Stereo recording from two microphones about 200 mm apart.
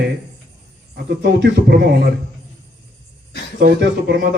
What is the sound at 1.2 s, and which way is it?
Speech, 60° right (ahead or behind).